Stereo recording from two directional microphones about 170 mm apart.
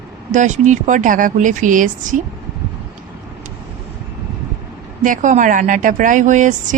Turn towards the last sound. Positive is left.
turn(degrees=-45)  # may be behind; listen again after turning